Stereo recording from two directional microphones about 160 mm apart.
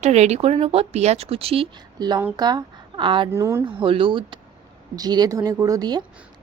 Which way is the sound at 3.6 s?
35° right (ahead or behind).